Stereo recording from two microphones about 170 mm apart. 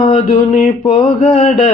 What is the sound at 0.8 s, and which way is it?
Mantra, 35° left (ahead or behind).